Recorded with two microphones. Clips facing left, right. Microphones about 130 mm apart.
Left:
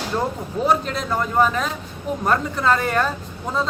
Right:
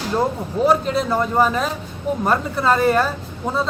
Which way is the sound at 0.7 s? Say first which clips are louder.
Right 2 dB; 5° right (ahead or behind).